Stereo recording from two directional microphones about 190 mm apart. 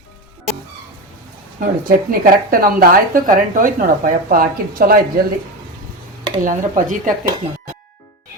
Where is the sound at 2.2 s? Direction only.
50° right (ahead or behind).